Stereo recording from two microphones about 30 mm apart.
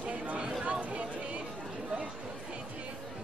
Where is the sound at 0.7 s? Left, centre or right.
Right.